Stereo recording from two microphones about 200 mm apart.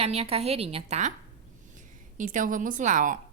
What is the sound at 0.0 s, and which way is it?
A woman's voice, 30° right (ahead or behind).